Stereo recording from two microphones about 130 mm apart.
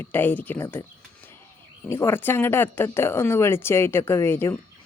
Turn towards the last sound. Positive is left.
turn(degrees=20)  # may be behind; listen again after turning